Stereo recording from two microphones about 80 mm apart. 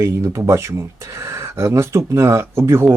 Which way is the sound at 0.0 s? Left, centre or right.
Right.